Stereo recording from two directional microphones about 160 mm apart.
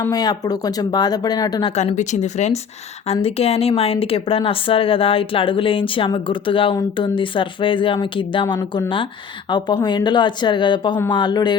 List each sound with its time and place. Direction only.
0.1 s speech: 25° left (ahead or behind)
1.7 s a woman's voice: 45° left (ahead or behind); by 11.5 s 25° left (ahead or behind)